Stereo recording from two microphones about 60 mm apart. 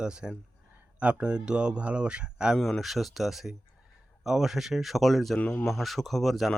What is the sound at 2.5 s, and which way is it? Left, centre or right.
Speech, centre.